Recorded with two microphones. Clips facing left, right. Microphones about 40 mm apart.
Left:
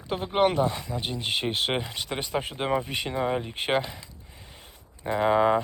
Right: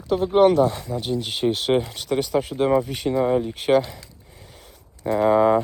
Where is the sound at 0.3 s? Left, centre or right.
Left.